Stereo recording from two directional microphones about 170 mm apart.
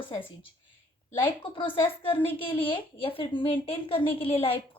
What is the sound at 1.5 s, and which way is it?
A woman's voice, 30° left (ahead or behind).